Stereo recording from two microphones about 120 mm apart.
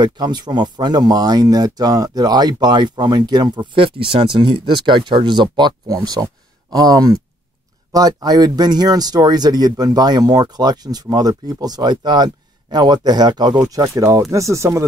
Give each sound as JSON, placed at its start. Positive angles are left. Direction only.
{"t": 0.0, "sound": "speech", "side_deg": -40}